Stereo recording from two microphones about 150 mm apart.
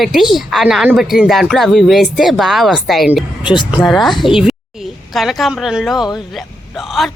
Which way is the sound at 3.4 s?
30° left (ahead or behind).